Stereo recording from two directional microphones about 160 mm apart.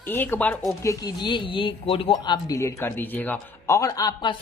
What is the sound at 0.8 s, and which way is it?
Speech, 20° left (ahead or behind).